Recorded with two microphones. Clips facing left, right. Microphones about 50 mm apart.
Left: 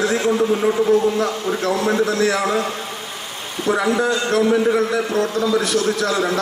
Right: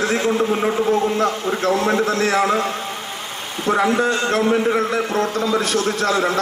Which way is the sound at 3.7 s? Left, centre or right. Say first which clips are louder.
Right 1 dB; right.